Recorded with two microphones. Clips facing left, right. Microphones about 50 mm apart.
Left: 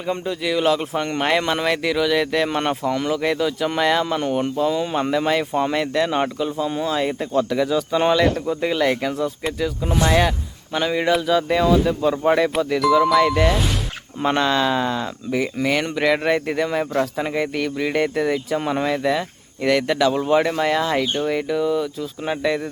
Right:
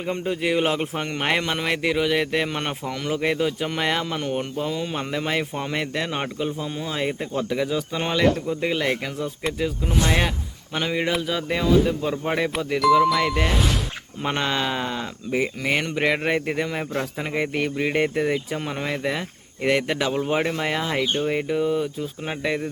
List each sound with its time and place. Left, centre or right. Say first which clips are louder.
0.3 s a man's voice: left 2 dB; right
0.9 s speech: left 4 dB; centre
1.6 s speech: left 2 dB; centre
2.5 s speech: left 6 dB; centre
3.1 s speech: right 3 dB; right
4.1 s speech: left 5 dB; centre
9.9 s speech: left 4 dB; left
10.8 s speech: left 4 dB; centre
16.9 s speech: left 6 dB; centre
17.3 s speech: right 2 dB; right
18.5 s speech: left 6 dB; centre
18.9 s speech: left 5 dB; centre